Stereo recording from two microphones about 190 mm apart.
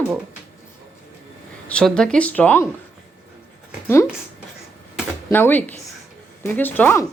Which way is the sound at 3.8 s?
15° left (ahead or behind).